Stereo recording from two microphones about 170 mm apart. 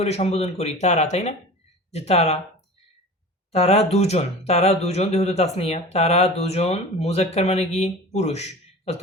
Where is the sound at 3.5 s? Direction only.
40° left (ahead or behind).